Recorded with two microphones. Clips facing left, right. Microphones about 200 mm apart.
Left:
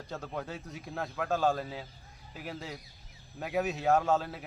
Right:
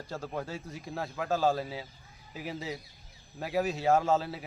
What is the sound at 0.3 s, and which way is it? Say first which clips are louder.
Speech: right 1 dB; centre (ahead or behind).